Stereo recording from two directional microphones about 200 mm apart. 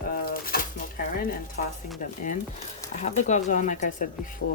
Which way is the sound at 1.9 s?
40° left (ahead or behind).